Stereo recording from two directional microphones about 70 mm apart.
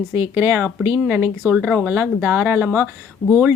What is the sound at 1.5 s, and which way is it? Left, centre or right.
Speech, right.